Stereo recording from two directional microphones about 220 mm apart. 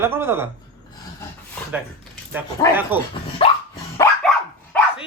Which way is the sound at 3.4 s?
25° left (ahead or behind).